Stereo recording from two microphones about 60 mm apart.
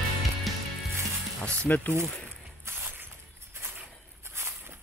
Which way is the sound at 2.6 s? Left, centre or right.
Right.